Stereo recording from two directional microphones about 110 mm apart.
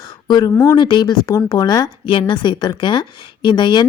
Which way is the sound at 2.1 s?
50° left (ahead or behind).